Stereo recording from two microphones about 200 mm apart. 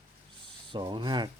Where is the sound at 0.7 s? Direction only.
25° right (ahead or behind).